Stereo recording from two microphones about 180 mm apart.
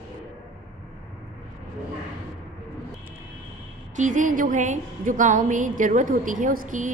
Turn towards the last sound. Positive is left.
turn(degrees=-50)  # may be behind; listen again after turning